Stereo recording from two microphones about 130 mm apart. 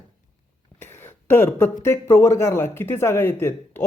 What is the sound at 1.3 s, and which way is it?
Speech, 15° left (ahead or behind).